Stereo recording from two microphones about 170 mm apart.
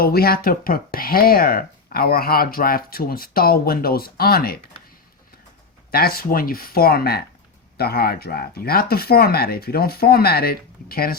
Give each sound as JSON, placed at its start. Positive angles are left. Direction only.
{"t": 0.0, "sound": "speech", "side_deg": 65}
{"t": 5.9, "sound": "speech", "side_deg": 65}